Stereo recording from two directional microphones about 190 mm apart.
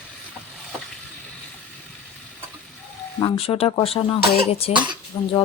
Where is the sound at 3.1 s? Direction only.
25° left (ahead or behind).